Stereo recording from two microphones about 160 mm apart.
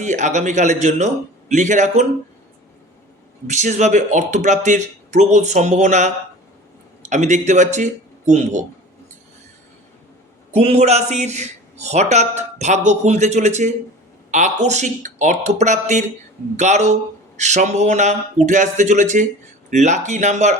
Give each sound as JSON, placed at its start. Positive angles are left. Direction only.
{"t": 0.0, "sound": "a man's voice", "side_deg": -50}
{"t": 3.4, "sound": "a man's voice", "side_deg": -50}
{"t": 10.5, "sound": "a man's voice", "side_deg": -40}